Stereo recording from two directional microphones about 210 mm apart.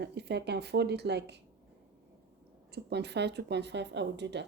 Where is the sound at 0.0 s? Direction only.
55° right (ahead or behind).